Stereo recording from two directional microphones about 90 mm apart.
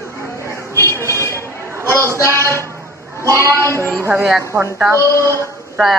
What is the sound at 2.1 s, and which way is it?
Speech, 30° left (ahead or behind).